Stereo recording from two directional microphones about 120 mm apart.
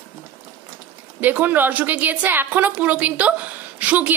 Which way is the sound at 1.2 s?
15° right (ahead or behind).